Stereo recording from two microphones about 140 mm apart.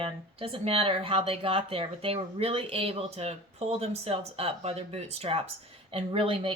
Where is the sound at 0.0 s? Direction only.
40° right (ahead or behind).